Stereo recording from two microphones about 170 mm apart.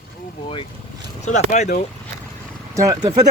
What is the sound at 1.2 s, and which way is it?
Speech, 45° left (ahead or behind).